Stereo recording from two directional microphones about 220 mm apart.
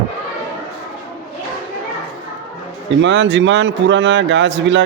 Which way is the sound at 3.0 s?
55° right (ahead or behind).